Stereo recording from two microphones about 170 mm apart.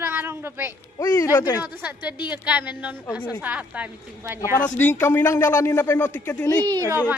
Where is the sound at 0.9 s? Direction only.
20° left (ahead or behind).